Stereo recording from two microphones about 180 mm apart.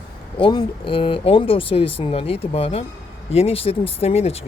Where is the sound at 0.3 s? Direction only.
30° left (ahead or behind).